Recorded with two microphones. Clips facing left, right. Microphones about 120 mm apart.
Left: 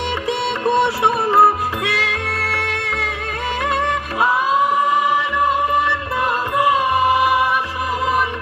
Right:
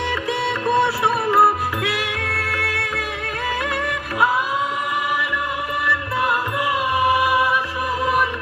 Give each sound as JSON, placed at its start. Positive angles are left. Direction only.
{"t": 0.6, "sound": "music", "side_deg": 25}
{"t": 5.8, "sound": "music", "side_deg": 25}